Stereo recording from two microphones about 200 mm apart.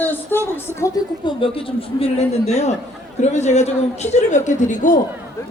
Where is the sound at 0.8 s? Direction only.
25° left (ahead or behind).